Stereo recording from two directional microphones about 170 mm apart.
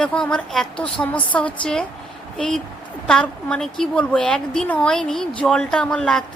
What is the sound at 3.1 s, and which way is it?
A woman's voice, 5° left (ahead or behind).